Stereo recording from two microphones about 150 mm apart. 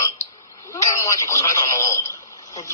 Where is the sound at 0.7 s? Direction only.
20° left (ahead or behind).